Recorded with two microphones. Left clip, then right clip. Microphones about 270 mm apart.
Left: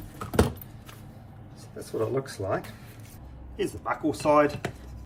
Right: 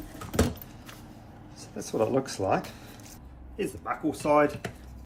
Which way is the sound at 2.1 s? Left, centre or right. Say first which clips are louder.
Right 3 dB; centre.